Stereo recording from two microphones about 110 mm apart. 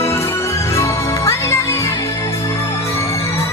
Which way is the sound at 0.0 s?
25° left (ahead or behind).